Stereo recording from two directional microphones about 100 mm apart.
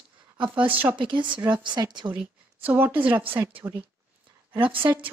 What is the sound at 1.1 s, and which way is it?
A woman's voice, 55° right (ahead or behind).